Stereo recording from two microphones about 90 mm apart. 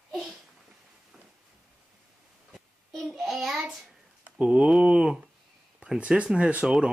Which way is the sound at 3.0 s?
5° right (ahead or behind).